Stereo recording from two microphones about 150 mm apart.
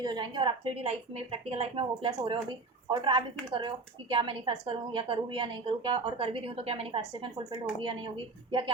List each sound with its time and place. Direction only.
0.0 s a woman's voice: 30° right (ahead or behind)